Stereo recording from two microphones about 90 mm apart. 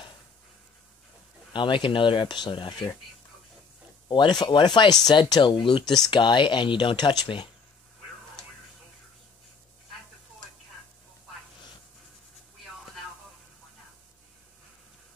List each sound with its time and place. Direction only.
1.5 s speech: 65° left (ahead or behind)
4.1 s speech: 60° left (ahead or behind)